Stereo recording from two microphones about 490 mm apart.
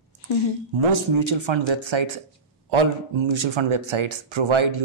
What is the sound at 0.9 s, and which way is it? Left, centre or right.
Speech, right.